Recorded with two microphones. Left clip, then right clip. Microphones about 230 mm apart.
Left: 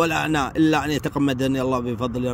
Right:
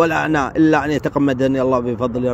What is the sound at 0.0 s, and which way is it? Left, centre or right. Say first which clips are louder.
Speech: right 5 dB; centre.